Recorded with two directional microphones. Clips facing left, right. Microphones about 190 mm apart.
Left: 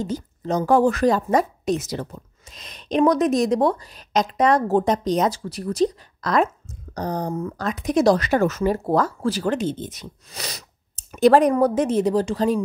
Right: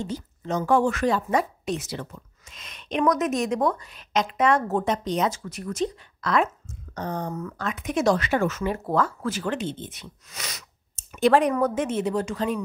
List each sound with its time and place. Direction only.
0.0 s a woman's voice: 40° left (ahead or behind)